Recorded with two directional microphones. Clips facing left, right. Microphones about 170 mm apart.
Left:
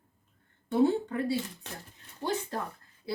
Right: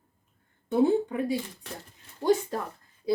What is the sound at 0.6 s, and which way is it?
Speech, 15° right (ahead or behind).